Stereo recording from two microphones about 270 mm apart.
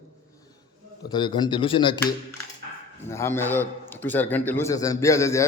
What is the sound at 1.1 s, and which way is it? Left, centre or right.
Speech, centre.